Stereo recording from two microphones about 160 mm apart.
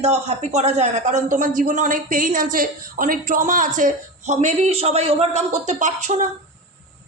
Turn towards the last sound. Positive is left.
turn(degrees=-50)  # may be behind; listen again after turning